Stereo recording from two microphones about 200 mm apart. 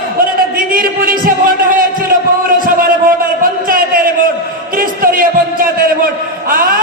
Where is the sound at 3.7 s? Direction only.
45° right (ahead or behind).